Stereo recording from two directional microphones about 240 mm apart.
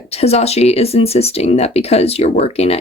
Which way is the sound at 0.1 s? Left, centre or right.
Left.